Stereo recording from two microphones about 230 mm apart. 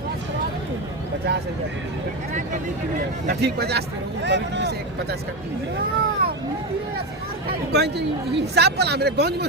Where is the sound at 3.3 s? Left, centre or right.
Right.